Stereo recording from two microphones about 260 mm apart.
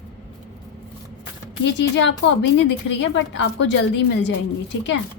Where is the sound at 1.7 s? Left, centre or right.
Left.